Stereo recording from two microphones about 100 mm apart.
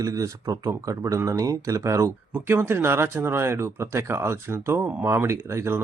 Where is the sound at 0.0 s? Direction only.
35° right (ahead or behind).